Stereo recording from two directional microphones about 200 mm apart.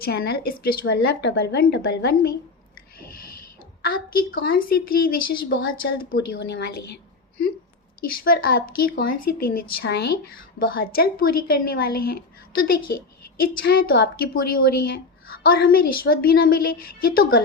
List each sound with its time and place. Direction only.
0.0 s a woman's voice: 50° left (ahead or behind)
3.8 s a woman's voice: 45° left (ahead or behind)
8.0 s a woman's voice: 45° left (ahead or behind)